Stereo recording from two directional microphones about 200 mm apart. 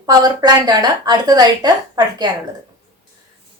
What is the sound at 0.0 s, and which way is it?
A woman's voice, 20° right (ahead or behind).